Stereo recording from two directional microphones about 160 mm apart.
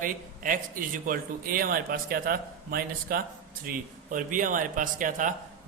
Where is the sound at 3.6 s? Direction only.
55° right (ahead or behind).